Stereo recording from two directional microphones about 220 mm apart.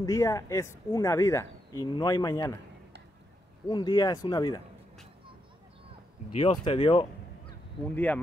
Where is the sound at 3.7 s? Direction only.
20° left (ahead or behind).